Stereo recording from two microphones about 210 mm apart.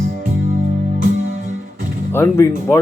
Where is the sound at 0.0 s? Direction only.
55° right (ahead or behind).